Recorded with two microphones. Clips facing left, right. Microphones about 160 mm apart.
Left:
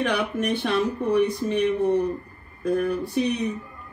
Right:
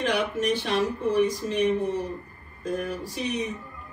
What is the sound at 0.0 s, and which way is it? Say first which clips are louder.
Speech: left 1 dB; 60° left (ahead or behind).